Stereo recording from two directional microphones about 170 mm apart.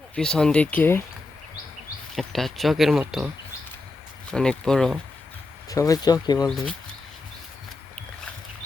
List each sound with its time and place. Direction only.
0.2 s speech: 5° left (ahead or behind)
2.1 s speech: centre (ahead or behind)
4.3 s speech: 5° left (ahead or behind)
5.6 s speech: 20° left (ahead or behind)